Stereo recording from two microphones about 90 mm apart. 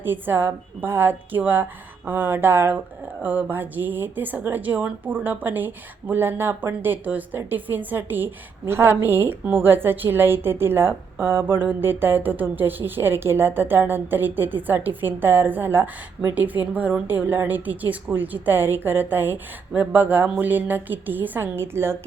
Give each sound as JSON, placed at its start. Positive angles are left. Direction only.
{"t": 0.0, "sound": "a woman's voice", "side_deg": -25}